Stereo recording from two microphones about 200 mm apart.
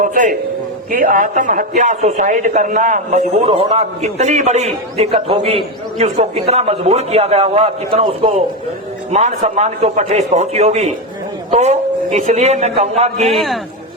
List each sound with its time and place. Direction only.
0.0 s a man's voice: 40° right (ahead or behind)
13.3 s a man's voice: centre (ahead or behind)